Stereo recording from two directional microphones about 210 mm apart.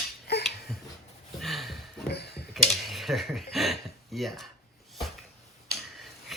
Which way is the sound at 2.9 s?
Centre (ahead or behind).